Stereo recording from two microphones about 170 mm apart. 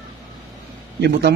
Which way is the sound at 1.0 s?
75° right (ahead or behind).